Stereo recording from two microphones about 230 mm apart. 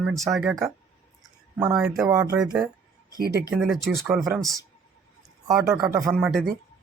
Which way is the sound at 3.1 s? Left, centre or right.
Right.